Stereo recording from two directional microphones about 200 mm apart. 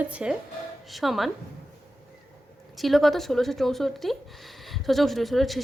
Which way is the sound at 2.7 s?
Centre (ahead or behind).